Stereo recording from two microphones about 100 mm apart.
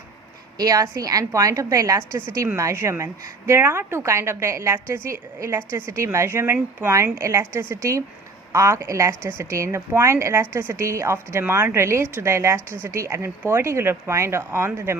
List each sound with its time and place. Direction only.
0.6 s a woman's voice: 40° right (ahead or behind)